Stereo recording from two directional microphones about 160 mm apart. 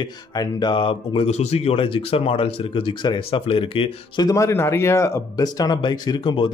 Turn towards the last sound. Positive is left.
turn(degrees=30)  # may be behind; listen again after turning